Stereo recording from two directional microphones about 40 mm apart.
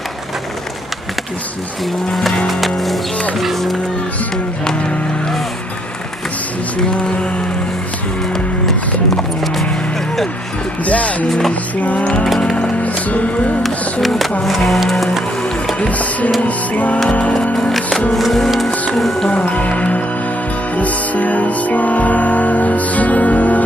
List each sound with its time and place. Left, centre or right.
2.1 s music: centre
8.6 s music: centre
10.9 s music: left
14.0 s music: centre
15.9 s music: left
17.6 s music: centre
19.2 s music: left